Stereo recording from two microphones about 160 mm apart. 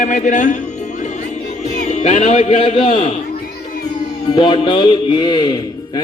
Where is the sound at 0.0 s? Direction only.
50° left (ahead or behind).